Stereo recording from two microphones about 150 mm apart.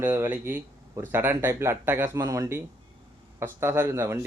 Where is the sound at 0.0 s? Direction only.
15° right (ahead or behind).